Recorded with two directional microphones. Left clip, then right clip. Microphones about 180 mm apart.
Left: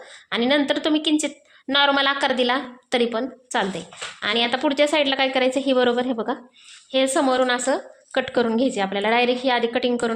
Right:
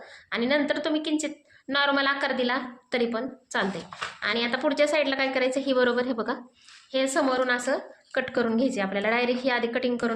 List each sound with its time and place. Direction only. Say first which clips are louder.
0.3 s a woman's voice: left 5 dB; 50° left (ahead or behind); by 6.4 s 25° left (ahead or behind)
6.9 s a woman's voice: left 5 dB; 40° left (ahead or behind)